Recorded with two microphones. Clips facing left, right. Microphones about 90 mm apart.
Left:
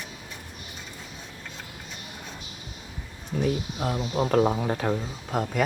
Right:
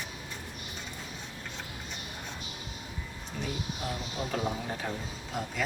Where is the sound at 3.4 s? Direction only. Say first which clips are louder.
Left 9 dB; 55° left (ahead or behind).